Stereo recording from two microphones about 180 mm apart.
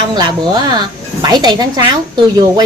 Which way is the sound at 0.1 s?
25° right (ahead or behind).